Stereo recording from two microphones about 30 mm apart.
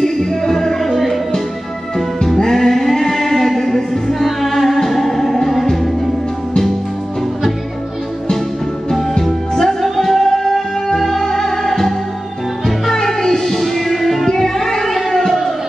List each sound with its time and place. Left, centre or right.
0.0 s music: centre
2.2 s music: centre
9.2 s music: centre
12.9 s music: centre
15.0 s a sound: centre